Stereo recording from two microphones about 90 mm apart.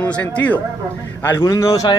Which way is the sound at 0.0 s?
15° left (ahead or behind).